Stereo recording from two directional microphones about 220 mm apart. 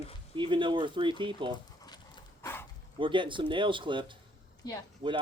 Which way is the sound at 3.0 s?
20° right (ahead or behind).